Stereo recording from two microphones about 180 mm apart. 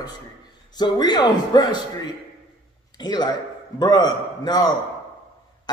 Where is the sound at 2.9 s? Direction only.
25° left (ahead or behind).